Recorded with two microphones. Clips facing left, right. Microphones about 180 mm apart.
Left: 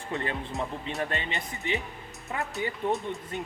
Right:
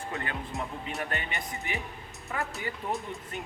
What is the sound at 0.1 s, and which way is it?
Speech, 25° left (ahead or behind).